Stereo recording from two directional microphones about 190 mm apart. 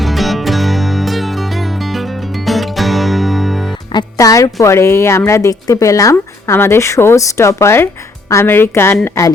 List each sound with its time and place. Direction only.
0.0 s music: centre (ahead or behind)
3.9 s speech: 20° left (ahead or behind)